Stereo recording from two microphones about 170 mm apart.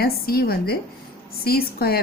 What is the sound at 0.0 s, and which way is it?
A woman's voice, 65° left (ahead or behind).